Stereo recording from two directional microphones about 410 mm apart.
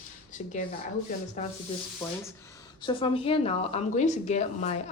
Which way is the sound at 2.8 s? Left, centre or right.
Centre.